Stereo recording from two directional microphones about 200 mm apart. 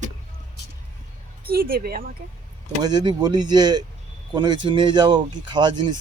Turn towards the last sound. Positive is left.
turn(degrees=-20)  # may be behind; listen again after turning